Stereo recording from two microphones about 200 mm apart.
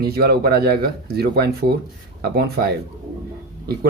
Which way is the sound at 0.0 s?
50° right (ahead or behind).